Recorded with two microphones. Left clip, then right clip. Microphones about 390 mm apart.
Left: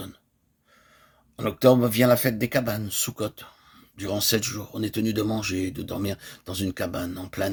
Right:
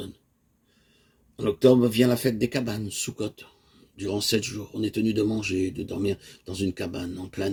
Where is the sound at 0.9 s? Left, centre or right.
Left.